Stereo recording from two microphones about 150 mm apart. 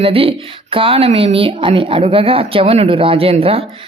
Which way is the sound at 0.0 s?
40° right (ahead or behind).